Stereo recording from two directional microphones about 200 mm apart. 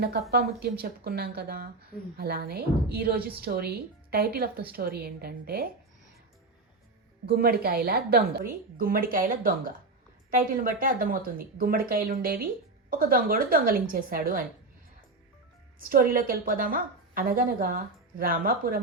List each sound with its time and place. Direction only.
0.0 s a woman's voice: 50° right (ahead or behind)
7.3 s a woman's voice: 50° right (ahead or behind)
15.8 s a woman's voice: 45° right (ahead or behind)